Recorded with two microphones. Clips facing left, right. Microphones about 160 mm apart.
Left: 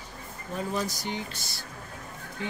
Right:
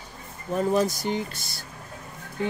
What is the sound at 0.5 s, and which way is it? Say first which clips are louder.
Speech: right 8 dB; 50° right (ahead or behind).